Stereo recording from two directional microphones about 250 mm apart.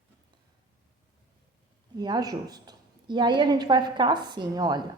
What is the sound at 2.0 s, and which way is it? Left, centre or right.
A woman's voice, centre.